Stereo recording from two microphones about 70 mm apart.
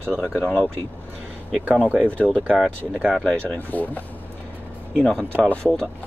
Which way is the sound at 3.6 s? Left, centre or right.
Left.